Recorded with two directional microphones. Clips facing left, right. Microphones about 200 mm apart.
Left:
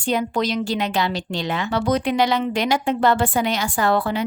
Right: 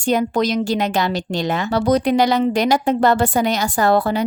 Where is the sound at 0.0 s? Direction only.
45° right (ahead or behind).